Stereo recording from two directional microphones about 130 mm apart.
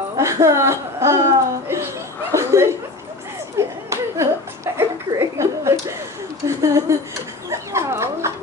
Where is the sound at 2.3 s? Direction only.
20° right (ahead or behind).